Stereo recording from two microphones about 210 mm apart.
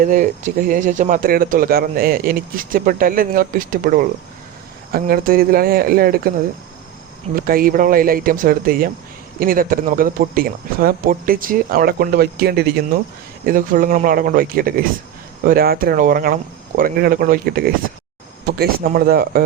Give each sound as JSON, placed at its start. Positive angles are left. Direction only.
{"t": 0.0, "sound": "speech", "side_deg": -40}
{"t": 7.3, "sound": "speech", "side_deg": -45}